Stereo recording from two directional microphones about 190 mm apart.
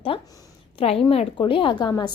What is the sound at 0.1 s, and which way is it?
A woman's voice, 30° left (ahead or behind).